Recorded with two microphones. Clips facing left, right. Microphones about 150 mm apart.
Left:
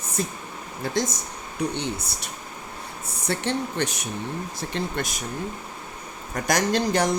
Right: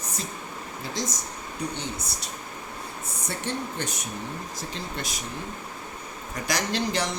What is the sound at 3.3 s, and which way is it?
Speech, 75° left (ahead or behind).